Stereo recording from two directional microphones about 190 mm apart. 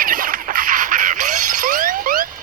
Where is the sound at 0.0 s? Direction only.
50° right (ahead or behind).